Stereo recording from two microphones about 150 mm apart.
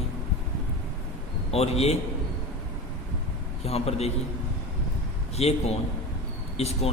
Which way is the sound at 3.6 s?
45° left (ahead or behind).